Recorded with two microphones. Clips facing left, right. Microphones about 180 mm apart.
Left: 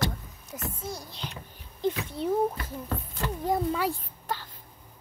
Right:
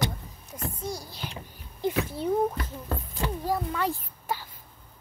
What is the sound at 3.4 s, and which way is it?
Speech, 20° left (ahead or behind).